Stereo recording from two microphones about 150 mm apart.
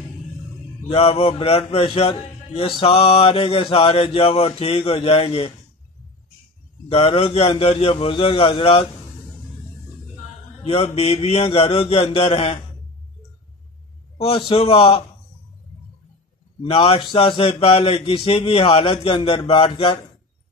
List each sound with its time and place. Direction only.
0.8 s a man's voice: 45° left (ahead or behind)
6.9 s a man's voice: 40° left (ahead or behind)
10.6 s a man's voice: 45° left (ahead or behind)
14.1 s a man's voice: 40° left (ahead or behind)
16.6 s a man's voice: 40° left (ahead or behind)